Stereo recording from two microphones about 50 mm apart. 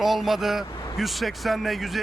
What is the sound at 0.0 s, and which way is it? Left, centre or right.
Speech, centre.